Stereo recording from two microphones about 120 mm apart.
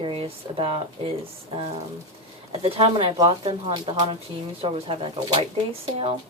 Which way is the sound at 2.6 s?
55° right (ahead or behind).